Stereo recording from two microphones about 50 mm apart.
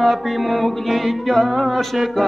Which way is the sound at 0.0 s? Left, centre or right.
Centre.